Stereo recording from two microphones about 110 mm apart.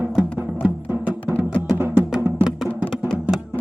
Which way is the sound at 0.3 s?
10° right (ahead or behind).